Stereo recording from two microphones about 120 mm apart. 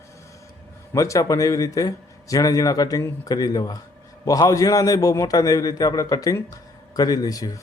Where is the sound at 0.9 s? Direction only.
25° left (ahead or behind).